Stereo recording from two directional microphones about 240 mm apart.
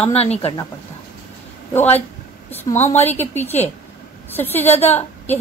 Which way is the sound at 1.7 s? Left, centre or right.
Centre.